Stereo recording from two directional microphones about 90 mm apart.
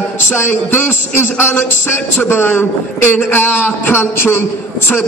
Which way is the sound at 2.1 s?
25° left (ahead or behind).